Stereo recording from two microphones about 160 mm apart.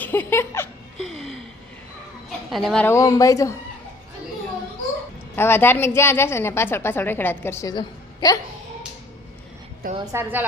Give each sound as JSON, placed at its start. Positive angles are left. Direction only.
{"t": 0.0, "sound": "music", "side_deg": 15}
{"t": 1.0, "sound": "a sound", "side_deg": 0}
{"t": 2.5, "sound": "speech", "side_deg": 0}
{"t": 2.8, "sound": "speech", "side_deg": 20}
{"t": 5.4, "sound": "a woman's voice", "side_deg": 15}
{"t": 10.0, "sound": "a woman's voice", "side_deg": -20}